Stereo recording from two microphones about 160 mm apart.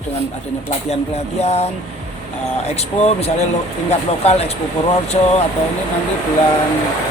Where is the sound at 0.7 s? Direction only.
40° left (ahead or behind).